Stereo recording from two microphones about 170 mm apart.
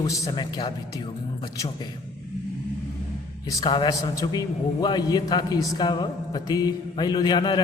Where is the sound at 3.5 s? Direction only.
25° left (ahead or behind).